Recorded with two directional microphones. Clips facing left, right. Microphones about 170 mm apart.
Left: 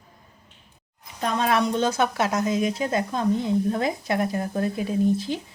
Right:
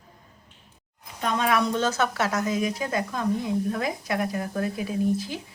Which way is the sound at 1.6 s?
15° left (ahead or behind).